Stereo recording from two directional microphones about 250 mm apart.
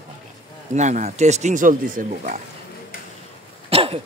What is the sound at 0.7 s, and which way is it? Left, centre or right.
Speech, right.